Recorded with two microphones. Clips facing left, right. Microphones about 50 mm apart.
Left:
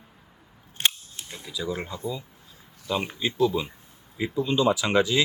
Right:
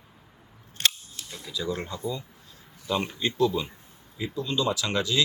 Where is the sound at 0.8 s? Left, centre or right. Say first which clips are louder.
Left 1 dB; left.